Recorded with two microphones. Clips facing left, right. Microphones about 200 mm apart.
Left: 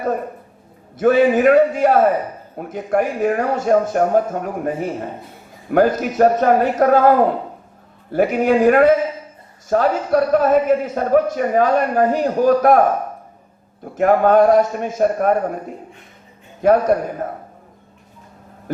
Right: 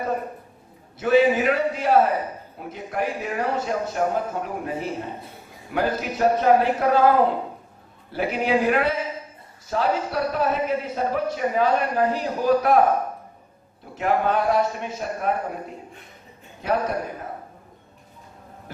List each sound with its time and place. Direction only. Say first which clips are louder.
0.9 s a man's voice: left 4 dB; 50° left (ahead or behind)
8.1 s a man's voice: left 7 dB; 45° left (ahead or behind)
13.9 s a man's voice: left 9 dB; 50° left (ahead or behind)
16.6 s a man's voice: left 10 dB; 50° left (ahead or behind)